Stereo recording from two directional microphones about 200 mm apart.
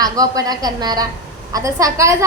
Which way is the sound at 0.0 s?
20° right (ahead or behind).